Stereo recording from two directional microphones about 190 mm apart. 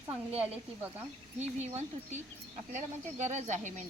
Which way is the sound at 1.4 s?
35° right (ahead or behind).